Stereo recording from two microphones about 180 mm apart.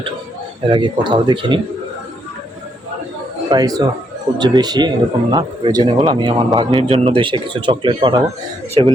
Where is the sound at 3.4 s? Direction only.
20° right (ahead or behind).